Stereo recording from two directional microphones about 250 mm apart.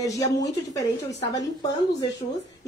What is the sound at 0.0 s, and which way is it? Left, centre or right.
Speech, centre.